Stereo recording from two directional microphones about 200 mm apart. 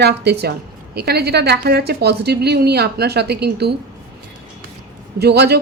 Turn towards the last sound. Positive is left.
turn(degrees=-55)  # may be behind; listen again after turning